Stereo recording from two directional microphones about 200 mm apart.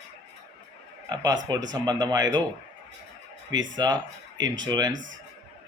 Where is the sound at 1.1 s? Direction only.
20° right (ahead or behind).